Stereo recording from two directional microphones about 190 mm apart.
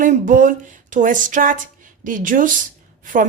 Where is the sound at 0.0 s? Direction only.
45° right (ahead or behind).